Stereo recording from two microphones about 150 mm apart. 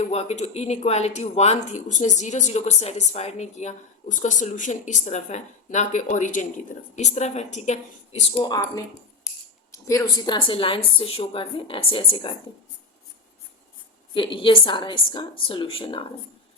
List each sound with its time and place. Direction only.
0.1 s speech: 45° left (ahead or behind)
8.4 s a woman's voice: 25° left (ahead or behind)
14.1 s a woman's voice: 35° left (ahead or behind)